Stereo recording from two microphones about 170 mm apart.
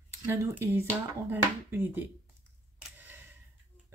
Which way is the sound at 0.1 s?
15° right (ahead or behind).